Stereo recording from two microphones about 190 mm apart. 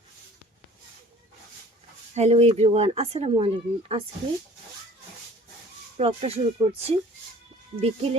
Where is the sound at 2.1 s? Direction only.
35° right (ahead or behind).